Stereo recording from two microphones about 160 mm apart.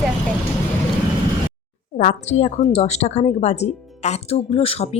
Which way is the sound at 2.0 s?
45° left (ahead or behind).